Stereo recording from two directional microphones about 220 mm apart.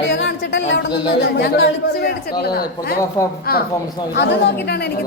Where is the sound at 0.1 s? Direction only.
55° left (ahead or behind).